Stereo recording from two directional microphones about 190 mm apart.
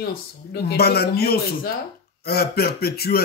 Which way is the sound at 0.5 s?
55° left (ahead or behind).